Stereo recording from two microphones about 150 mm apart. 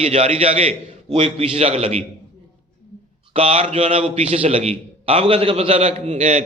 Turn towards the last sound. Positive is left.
turn(degrees=-50)  # may be behind; listen again after turning